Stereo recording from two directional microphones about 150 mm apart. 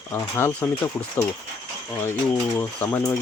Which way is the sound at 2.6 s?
15° left (ahead or behind).